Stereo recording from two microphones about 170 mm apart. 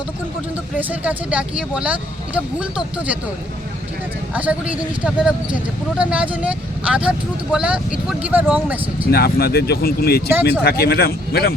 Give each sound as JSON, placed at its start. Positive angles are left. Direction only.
{"t": 0.8, "sound": "speech", "side_deg": -10}
{"t": 4.4, "sound": "speech", "side_deg": -10}
{"t": 9.0, "sound": "speech", "side_deg": 65}